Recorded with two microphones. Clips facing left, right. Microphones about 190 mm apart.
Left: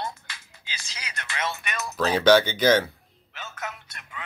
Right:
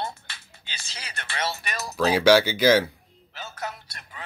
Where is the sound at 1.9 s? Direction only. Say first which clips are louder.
Even; 10° right (ahead or behind).